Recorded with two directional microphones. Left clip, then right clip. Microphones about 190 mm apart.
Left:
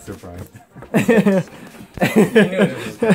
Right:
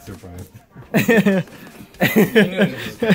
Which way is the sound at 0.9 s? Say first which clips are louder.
Left 1 dB; centre (ahead or behind).